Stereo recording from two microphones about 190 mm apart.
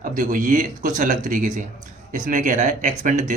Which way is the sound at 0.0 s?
45° right (ahead or behind).